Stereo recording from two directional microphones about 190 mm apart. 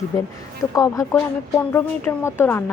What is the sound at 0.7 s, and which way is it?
A woman's voice, 15° left (ahead or behind).